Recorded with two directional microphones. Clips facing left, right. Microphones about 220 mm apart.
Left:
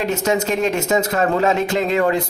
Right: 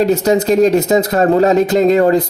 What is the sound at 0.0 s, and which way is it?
Speech, 35° right (ahead or behind).